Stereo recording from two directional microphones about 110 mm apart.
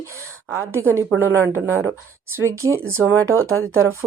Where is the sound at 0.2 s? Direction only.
25° right (ahead or behind).